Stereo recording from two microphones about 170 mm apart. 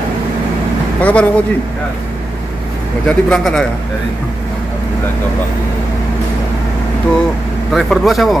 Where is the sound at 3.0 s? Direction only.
5° left (ahead or behind).